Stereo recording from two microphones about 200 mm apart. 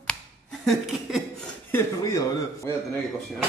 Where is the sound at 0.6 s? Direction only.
Centre (ahead or behind).